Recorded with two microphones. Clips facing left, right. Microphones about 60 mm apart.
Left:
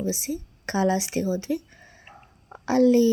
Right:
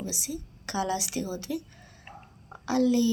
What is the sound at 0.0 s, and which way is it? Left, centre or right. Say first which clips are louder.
Speech: left 7 dB; left.